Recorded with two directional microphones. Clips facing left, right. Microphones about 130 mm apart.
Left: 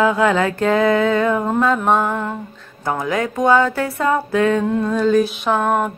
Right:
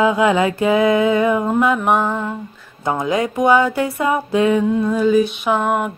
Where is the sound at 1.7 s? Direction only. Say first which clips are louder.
Even; 5° right (ahead or behind).